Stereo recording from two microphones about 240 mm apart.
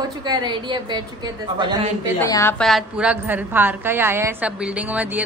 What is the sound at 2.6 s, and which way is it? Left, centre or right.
A woman's voice, centre.